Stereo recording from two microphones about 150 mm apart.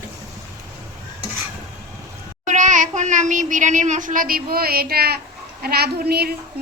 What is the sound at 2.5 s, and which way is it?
A child's voice, 55° right (ahead or behind).